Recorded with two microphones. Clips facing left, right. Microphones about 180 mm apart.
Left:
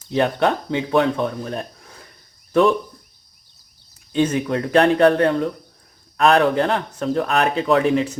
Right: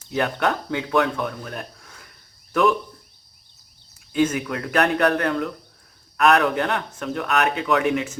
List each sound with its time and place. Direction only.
0.1 s speech: 25° left (ahead or behind)
4.1 s speech: 30° left (ahead or behind)